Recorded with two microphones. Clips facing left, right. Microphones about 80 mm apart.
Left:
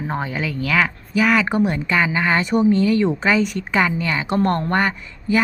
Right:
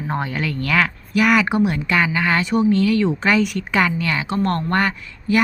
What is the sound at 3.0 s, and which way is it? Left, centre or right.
Speech, centre.